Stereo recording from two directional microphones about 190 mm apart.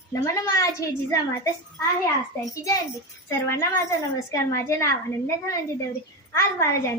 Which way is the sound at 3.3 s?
15° left (ahead or behind).